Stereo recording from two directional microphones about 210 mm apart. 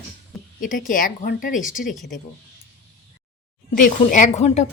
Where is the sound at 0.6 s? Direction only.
40° left (ahead or behind).